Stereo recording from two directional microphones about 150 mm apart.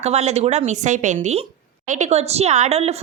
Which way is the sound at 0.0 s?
45° right (ahead or behind).